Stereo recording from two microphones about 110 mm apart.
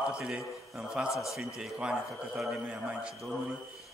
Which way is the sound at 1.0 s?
30° left (ahead or behind).